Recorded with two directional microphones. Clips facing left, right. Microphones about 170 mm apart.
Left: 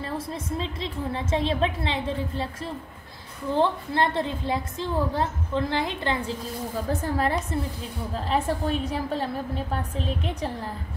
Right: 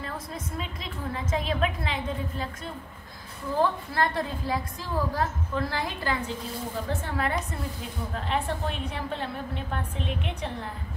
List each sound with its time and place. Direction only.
0.6 s a woman's voice: 30° left (ahead or behind)
6.9 s a woman's voice: 35° left (ahead or behind)